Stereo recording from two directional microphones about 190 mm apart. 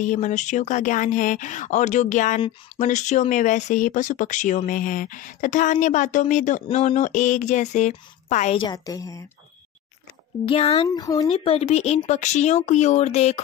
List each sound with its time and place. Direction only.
0.0 s speech: 40° left (ahead or behind)
8.5 s a woman's voice: 20° left (ahead or behind)
10.4 s a woman's voice: 30° left (ahead or behind)
11.0 s a woman's voice: 20° left (ahead or behind)
11.2 s speech: 30° left (ahead or behind)